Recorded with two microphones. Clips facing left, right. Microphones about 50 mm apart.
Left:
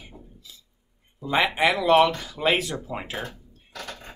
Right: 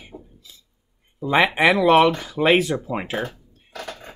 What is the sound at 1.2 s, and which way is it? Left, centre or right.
Speech, right.